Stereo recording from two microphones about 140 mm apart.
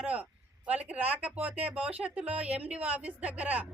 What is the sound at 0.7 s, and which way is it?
Speech, 10° right (ahead or behind).